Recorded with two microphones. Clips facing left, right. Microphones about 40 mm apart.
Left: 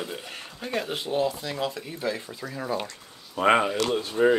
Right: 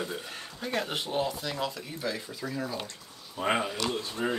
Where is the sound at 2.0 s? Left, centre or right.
Centre.